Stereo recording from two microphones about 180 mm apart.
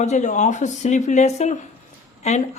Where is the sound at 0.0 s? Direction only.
40° left (ahead or behind).